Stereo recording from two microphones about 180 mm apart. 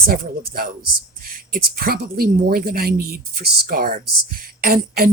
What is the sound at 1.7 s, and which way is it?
Speech, 55° right (ahead or behind).